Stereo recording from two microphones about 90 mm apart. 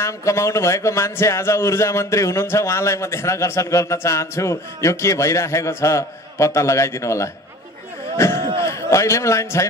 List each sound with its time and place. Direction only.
0.0 s a man's voice: 35° left (ahead or behind)